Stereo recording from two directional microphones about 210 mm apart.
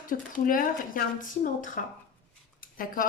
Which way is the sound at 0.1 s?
40° left (ahead or behind).